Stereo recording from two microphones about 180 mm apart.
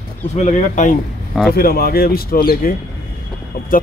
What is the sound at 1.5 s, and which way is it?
Speech, 55° left (ahead or behind).